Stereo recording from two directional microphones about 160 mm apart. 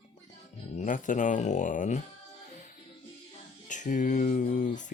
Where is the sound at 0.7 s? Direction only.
50° left (ahead or behind).